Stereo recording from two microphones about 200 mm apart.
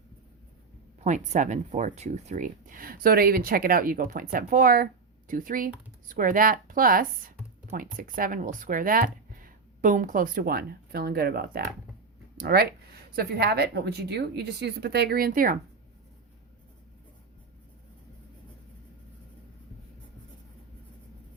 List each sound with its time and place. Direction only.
1.0 s speech: 35° right (ahead or behind)